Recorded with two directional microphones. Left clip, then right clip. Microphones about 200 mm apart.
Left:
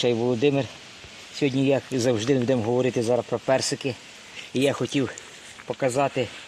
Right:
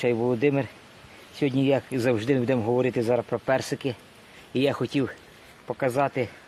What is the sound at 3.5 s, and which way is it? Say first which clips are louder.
Speech: left 3 dB; 20° left (ahead or behind).